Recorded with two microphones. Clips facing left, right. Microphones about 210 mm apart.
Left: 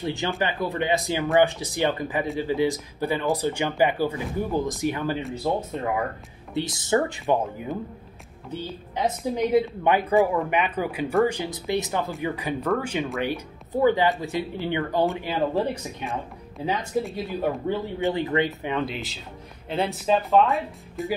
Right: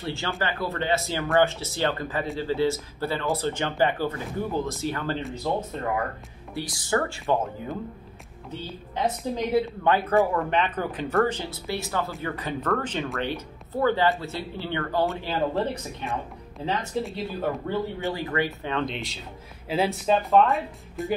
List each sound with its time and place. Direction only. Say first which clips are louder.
0.0 s a woman's voice: left 3 dB; 15° left (ahead or behind)
6.5 s speech: left 3 dB; 20° left (ahead or behind)
8.9 s a woman's voice: left 1 dB; 15° left (ahead or behind); by 21.1 s centre (ahead or behind)